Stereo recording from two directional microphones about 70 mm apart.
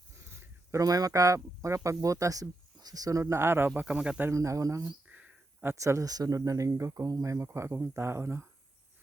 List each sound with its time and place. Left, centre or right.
0.2 s a sound: right
0.7 s speech: right
3.8 s speech: centre
4.3 s speech: right
5.0 s a sound: right
5.8 s speech: right
7.4 s speech: right